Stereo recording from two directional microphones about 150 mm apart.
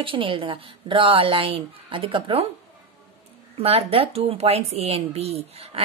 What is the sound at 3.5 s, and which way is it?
Speech, 40° right (ahead or behind).